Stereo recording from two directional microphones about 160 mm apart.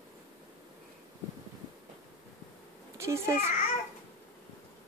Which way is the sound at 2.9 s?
15° right (ahead or behind).